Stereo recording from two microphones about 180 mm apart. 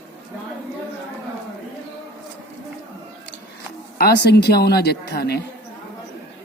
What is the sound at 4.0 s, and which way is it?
A man's voice, 65° left (ahead or behind).